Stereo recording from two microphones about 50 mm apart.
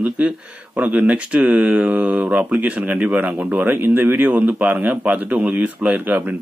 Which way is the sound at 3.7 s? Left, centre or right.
Right.